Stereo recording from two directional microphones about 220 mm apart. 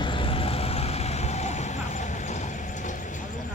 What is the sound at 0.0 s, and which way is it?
Vehicle, 25° left (ahead or behind).